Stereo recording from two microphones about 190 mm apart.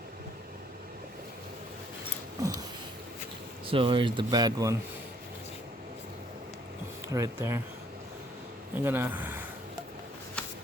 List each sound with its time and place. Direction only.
2.4 s a sound: 20° right (ahead or behind)
3.7 s speech: 25° right (ahead or behind)
7.1 s speech: 15° right (ahead or behind)
8.8 s speech: 10° right (ahead or behind)